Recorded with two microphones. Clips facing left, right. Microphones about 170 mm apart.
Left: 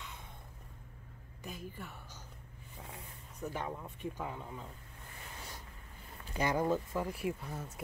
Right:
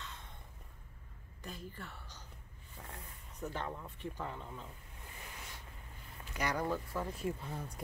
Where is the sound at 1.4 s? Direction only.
10° left (ahead or behind).